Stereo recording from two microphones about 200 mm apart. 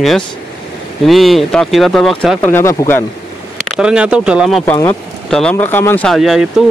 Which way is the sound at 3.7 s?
5° right (ahead or behind).